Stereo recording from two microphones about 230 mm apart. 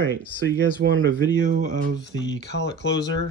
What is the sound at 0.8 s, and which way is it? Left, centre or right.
Speech, right.